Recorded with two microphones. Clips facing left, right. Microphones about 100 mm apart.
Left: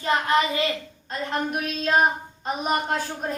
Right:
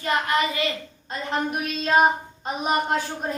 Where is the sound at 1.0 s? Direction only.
Centre (ahead or behind).